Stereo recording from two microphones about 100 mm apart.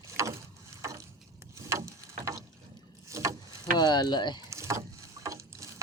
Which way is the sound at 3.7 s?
45° left (ahead or behind).